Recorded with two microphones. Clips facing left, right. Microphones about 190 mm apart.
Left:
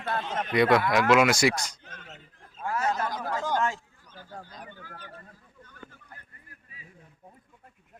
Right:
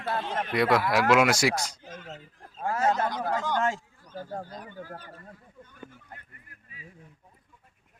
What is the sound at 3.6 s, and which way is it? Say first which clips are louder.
A man's voice: right 2 dB; 40° right (ahead or behind).